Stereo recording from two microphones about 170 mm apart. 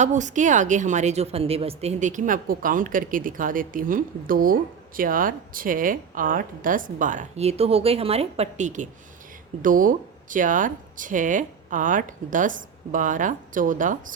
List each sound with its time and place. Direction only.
0.0 s a woman's voice: 45° right (ahead or behind)